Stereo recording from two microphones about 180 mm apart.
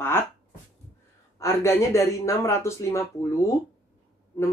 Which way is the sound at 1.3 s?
15° left (ahead or behind).